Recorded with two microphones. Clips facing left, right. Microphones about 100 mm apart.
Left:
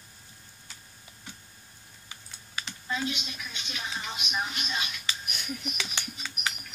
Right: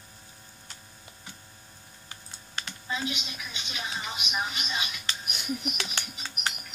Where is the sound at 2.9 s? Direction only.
10° right (ahead or behind).